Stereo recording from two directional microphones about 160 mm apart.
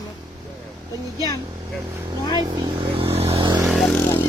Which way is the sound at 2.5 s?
35° right (ahead or behind).